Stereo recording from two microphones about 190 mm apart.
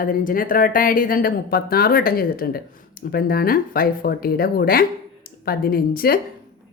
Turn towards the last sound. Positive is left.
turn(degrees=50)  # may be behind; listen again after turning